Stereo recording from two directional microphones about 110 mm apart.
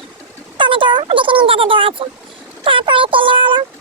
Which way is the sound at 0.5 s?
50° right (ahead or behind).